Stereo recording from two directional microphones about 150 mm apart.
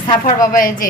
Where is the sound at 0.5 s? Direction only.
65° left (ahead or behind).